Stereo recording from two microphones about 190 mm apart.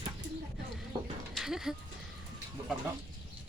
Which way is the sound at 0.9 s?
25° right (ahead or behind).